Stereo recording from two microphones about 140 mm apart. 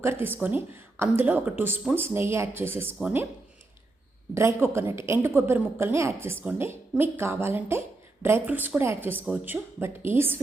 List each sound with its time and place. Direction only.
0.0 s a woman's voice: 15° right (ahead or behind)
4.4 s a woman's voice: 20° right (ahead or behind)